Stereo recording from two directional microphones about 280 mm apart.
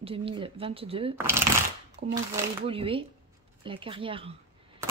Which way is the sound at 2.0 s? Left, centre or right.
Right.